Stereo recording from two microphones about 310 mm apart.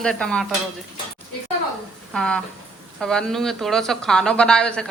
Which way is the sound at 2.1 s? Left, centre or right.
Centre.